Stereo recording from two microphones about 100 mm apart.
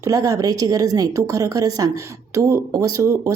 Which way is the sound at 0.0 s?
35° right (ahead or behind).